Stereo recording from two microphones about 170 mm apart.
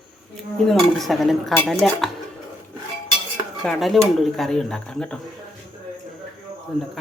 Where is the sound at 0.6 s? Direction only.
Centre (ahead or behind).